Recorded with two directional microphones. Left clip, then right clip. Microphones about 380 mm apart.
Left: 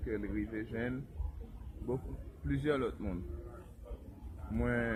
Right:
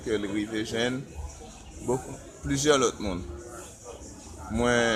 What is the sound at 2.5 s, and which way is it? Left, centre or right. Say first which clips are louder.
Speech: right 11 dB; centre.